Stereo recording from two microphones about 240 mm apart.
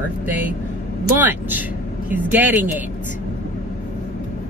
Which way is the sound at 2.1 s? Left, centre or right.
Centre.